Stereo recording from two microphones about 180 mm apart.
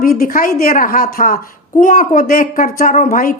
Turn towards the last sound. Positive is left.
turn(degrees=50)  # may be behind; listen again after turning